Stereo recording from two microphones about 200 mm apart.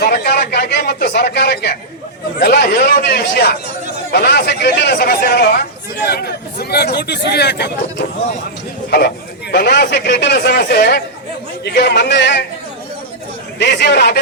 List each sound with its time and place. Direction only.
0.0 s a sound: 50° left (ahead or behind)
2.4 s speech: 55° left (ahead or behind)
13.6 s speech: 60° left (ahead or behind)